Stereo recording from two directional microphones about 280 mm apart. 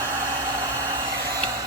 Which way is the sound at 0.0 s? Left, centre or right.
Centre.